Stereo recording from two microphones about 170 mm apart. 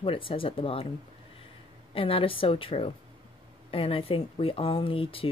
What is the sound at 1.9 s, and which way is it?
A woman's voice, 30° left (ahead or behind).